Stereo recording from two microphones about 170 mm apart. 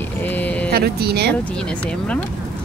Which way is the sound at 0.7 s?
65° right (ahead or behind).